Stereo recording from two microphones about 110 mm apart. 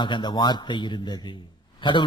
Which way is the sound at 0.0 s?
45° left (ahead or behind).